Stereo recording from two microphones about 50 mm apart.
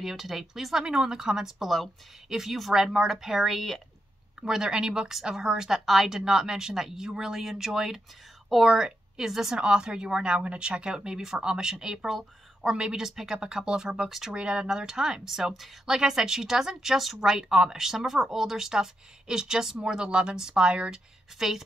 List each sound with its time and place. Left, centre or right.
0.0 s speech: centre
4.4 s speech: centre
14.3 s speech: centre
21.4 s speech: centre